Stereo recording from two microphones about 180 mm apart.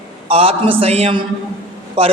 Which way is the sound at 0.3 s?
30° right (ahead or behind).